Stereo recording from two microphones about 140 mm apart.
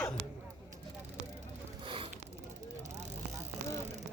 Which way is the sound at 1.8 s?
35° right (ahead or behind).